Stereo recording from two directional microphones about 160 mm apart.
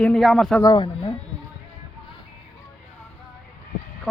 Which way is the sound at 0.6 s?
30° left (ahead or behind).